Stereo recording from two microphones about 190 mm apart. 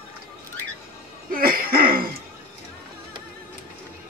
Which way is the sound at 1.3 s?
50° right (ahead or behind).